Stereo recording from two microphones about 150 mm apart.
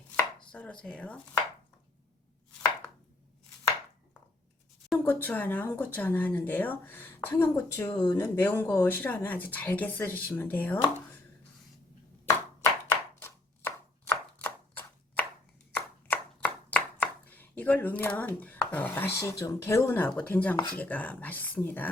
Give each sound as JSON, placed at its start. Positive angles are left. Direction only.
{"t": 0.5, "sound": "speech", "side_deg": 5}
{"t": 5.0, "sound": "speech", "side_deg": 10}
{"t": 12.9, "sound": "chopping", "side_deg": 15}
{"t": 20.7, "sound": "speech", "side_deg": 10}